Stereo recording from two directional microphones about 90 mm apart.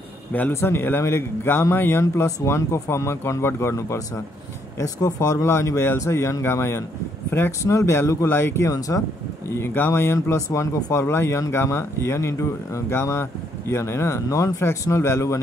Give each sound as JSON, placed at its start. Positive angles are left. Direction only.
{"t": 0.5, "sound": "speech", "side_deg": 30}
{"t": 9.6, "sound": "speech", "side_deg": 25}